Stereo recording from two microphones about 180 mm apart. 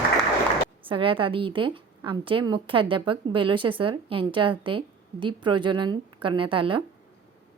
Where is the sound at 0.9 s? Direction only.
30° right (ahead or behind).